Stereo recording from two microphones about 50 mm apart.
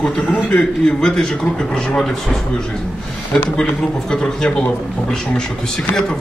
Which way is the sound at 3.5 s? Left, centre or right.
Centre.